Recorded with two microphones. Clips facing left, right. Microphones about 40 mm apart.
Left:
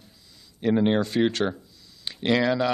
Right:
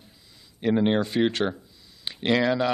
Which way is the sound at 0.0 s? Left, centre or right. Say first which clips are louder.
Even; centre.